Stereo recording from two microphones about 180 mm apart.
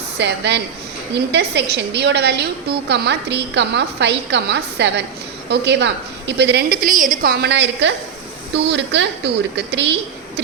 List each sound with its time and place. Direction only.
0.2 s a woman's voice: 70° right (ahead or behind)
6.8 s a woman's voice: 45° right (ahead or behind); by 9.9 s 75° right (ahead or behind)